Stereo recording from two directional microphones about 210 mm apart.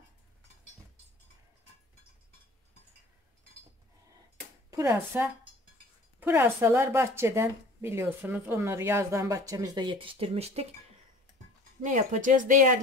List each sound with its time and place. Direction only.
4.6 s speech: 15° right (ahead or behind); by 10.7 s 30° right (ahead or behind)
11.8 s speech: 35° right (ahead or behind)